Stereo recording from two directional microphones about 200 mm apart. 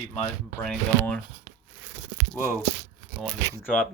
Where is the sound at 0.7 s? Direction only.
5° left (ahead or behind).